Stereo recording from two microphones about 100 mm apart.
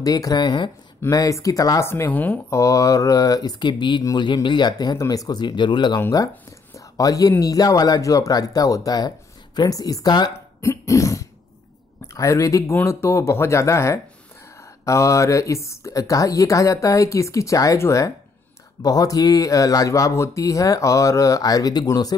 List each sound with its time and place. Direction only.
0.0 s speech: 40° left (ahead or behind)
1.1 s speech: 35° left (ahead or behind)
1.9 s speech: 20° left (ahead or behind)
2.5 s speech: 35° left (ahead or behind); by 5.9 s 50° left (ahead or behind)
7.0 s speech: 35° left (ahead or behind)
10.6 s cough: 30° left (ahead or behind)
12.1 s speech: 30° left (ahead or behind)